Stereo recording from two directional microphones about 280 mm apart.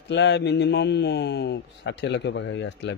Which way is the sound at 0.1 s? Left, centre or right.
Left.